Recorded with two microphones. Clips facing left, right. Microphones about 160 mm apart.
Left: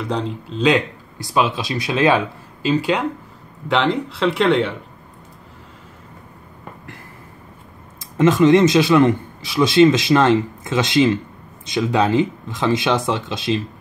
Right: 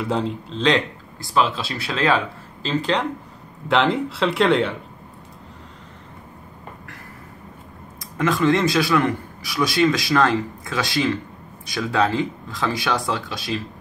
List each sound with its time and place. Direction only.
0.0 s speech: centre (ahead or behind)
8.2 s a man's voice: 20° left (ahead or behind)